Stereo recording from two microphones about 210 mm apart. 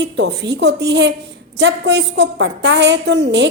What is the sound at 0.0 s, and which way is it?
A woman's voice, 55° right (ahead or behind).